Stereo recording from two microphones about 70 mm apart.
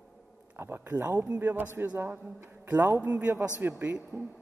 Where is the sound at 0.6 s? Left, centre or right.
Right.